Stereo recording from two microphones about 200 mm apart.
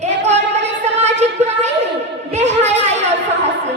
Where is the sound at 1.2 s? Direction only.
35° right (ahead or behind).